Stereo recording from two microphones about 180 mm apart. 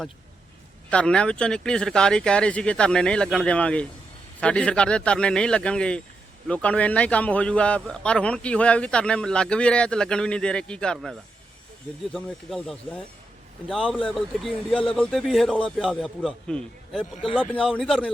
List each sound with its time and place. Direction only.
0.9 s a man's voice: 5° left (ahead or behind)